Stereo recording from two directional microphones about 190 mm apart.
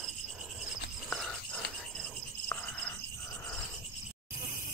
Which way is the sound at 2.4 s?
10° left (ahead or behind).